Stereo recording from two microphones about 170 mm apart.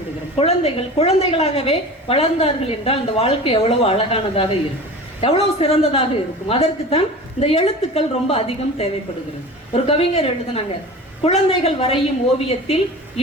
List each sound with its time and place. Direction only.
0.3 s a woman's voice: 35° left (ahead or behind)